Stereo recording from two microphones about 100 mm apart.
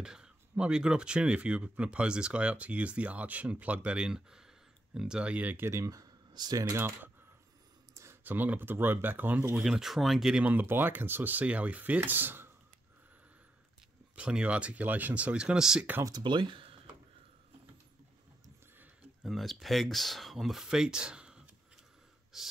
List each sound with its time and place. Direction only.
0.0 s speech: 10° right (ahead or behind); by 6.7 s 45° right (ahead or behind)
6.7 s speech: 20° right (ahead or behind)
9.6 s speech: 5° right (ahead or behind)
10.4 s speech: 20° right (ahead or behind)
14.1 s speech: 10° right (ahead or behind)
16.0 s speech: 45° right (ahead or behind)
19.2 s speech: centre (ahead or behind)
22.3 s gasp: 5° right (ahead or behind)